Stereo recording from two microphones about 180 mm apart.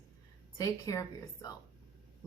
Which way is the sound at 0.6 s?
20° left (ahead or behind).